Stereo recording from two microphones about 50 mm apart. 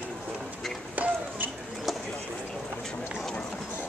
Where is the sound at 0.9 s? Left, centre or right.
Right.